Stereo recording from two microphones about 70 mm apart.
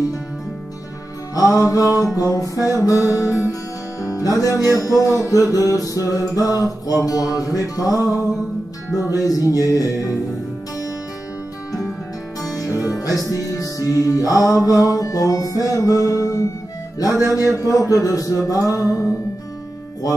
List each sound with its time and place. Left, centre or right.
1.3 s music: left
9.1 s music: left
12.4 s music: left
17.6 s music: left